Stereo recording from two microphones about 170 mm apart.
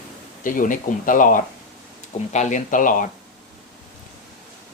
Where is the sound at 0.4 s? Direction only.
50° left (ahead or behind).